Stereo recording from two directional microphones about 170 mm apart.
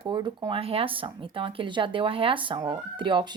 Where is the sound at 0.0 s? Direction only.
30° right (ahead or behind).